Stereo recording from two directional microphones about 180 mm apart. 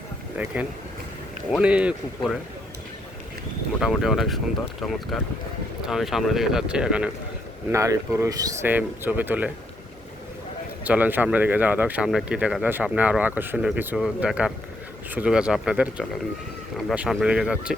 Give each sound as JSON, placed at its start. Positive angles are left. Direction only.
{"t": 1.5, "sound": "speech", "side_deg": -5}
{"t": 3.8, "sound": "speech", "side_deg": 0}
{"t": 7.7, "sound": "speech", "side_deg": -15}
{"t": 10.8, "sound": "speech", "side_deg": -10}